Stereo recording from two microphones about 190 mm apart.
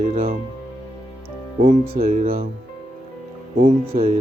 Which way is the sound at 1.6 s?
45° right (ahead or behind).